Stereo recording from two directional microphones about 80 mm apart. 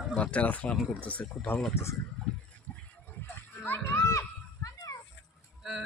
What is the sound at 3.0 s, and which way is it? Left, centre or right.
Children playing, left.